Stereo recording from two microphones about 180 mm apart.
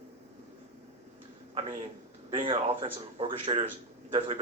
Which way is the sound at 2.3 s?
30° right (ahead or behind).